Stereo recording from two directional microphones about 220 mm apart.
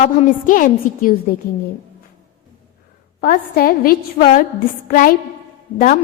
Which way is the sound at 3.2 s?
45° left (ahead or behind).